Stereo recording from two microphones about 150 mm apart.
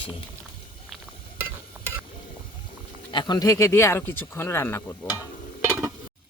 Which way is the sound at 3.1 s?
30° left (ahead or behind).